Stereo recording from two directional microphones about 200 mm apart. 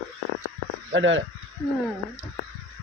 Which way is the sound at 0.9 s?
70° right (ahead or behind).